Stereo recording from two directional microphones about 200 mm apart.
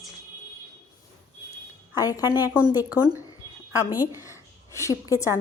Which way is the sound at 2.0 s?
20° left (ahead or behind).